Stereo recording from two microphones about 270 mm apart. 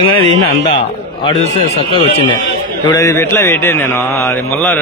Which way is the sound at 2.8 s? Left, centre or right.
Centre.